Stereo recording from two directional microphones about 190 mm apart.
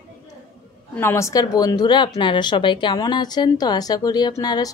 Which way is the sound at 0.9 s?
15° left (ahead or behind).